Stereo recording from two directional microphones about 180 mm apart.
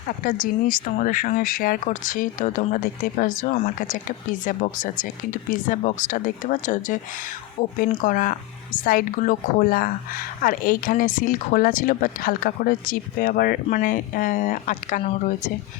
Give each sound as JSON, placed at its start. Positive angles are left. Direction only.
{"t": 0.7, "sound": "speech", "side_deg": 50}